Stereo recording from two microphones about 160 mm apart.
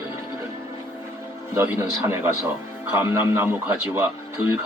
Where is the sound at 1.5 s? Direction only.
15° right (ahead or behind).